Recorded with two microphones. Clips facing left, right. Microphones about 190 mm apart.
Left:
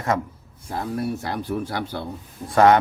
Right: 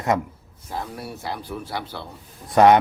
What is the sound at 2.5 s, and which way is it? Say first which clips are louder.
Speech: right 1 dB; 20° right (ahead or behind).